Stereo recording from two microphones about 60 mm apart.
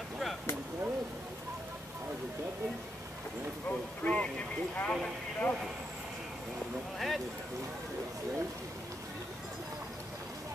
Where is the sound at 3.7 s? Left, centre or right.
Left.